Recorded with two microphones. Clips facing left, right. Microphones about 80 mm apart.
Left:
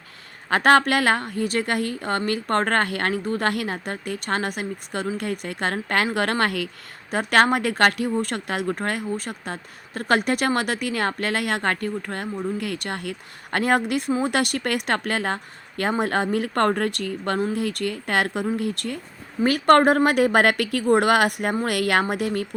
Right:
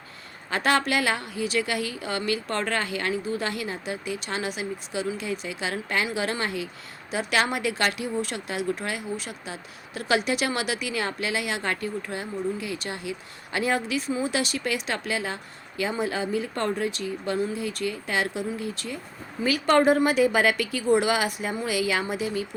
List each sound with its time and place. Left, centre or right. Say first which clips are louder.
0.5 s speech: left 6 dB; left
7.1 s speech: left 6 dB; left